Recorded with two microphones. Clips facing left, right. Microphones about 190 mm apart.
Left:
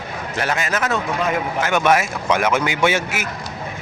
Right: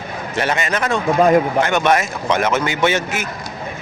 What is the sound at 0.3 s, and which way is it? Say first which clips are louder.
A man's voice: right 2 dB; centre (ahead or behind).